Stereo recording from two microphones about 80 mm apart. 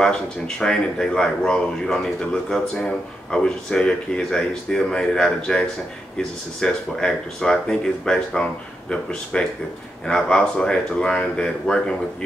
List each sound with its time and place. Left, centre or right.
0.0 s speech: centre